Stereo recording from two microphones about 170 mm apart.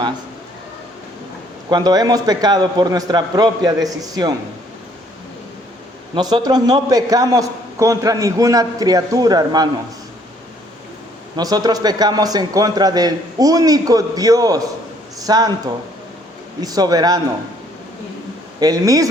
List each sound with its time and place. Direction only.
1.7 s a man's voice: 25° right (ahead or behind)
6.1 s a man's voice: 25° right (ahead or behind)
11.3 s a man's voice: 25° right (ahead or behind)
16.6 s a man's voice: 20° right (ahead or behind)
18.6 s a man's voice: 20° right (ahead or behind)